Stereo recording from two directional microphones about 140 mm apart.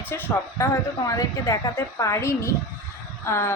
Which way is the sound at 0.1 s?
20° left (ahead or behind).